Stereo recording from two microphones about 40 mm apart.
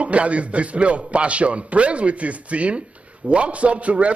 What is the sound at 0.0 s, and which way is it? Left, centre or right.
A man's voice, right.